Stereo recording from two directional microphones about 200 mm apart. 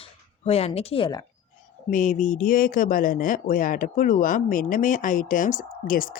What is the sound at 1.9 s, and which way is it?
A woman's voice, 40° left (ahead or behind).